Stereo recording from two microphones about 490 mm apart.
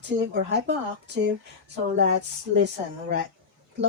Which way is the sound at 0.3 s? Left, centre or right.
Right.